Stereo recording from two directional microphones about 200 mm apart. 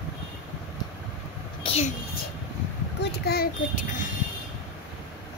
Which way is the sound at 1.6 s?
30° left (ahead or behind).